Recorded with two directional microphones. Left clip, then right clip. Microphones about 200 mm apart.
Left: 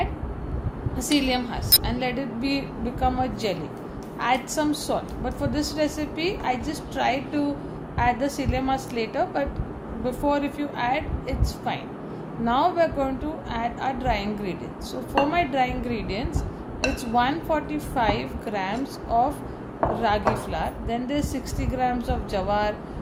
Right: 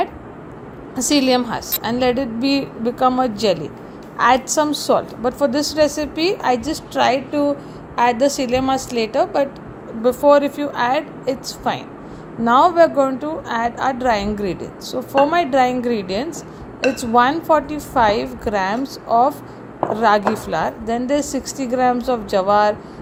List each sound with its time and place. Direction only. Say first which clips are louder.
0.9 s a woman's voice: right 8 dB; 40° right (ahead or behind)